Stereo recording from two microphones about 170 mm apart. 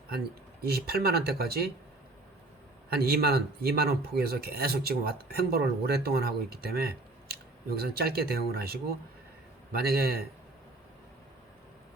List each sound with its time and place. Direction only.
0.6 s speech: 65° right (ahead or behind)
2.9 s speech: 65° right (ahead or behind)